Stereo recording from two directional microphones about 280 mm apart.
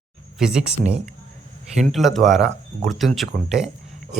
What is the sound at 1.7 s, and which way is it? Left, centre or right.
Speech, centre.